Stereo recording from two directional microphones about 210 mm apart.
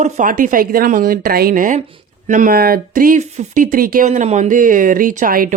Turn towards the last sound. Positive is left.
turn(degrees=-40)  # may be behind; listen again after turning